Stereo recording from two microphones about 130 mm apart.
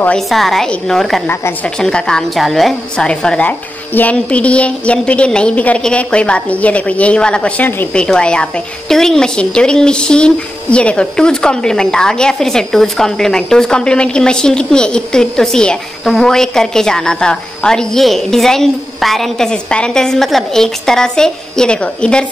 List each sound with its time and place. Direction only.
0.0 s a woman's voice: 5° left (ahead or behind)
1.2 s a woman's voice: 15° left (ahead or behind)